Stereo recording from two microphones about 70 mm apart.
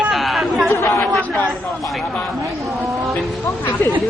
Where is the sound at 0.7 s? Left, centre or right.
Left.